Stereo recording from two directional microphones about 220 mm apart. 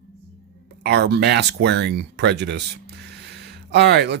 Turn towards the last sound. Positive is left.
turn(degrees=-50)  # may be behind; listen again after turning